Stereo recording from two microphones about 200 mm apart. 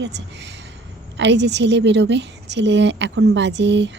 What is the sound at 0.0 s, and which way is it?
A woman's voice, 60° right (ahead or behind).